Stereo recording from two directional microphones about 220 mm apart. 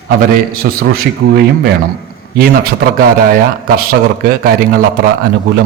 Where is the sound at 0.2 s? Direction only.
45° right (ahead or behind).